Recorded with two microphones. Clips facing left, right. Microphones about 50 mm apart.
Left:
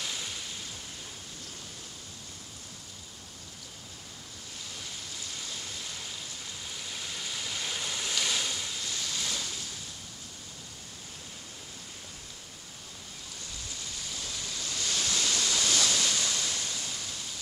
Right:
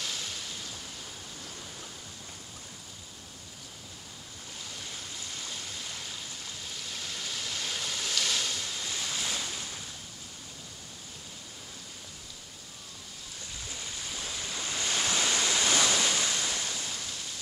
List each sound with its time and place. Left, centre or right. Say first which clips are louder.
0.0 s waves: even; centre
6.7 s waves: even; centre
8.6 s waves: right 1 dB; centre
14.1 s waves: right 2 dB; centre